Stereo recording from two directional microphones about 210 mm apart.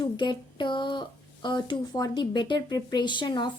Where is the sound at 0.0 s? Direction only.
20° left (ahead or behind).